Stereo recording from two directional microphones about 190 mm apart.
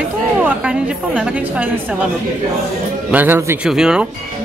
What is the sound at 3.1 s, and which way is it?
Speech, 10° right (ahead or behind).